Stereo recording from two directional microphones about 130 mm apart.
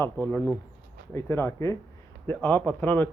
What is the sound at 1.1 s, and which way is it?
Speech, 20° left (ahead or behind).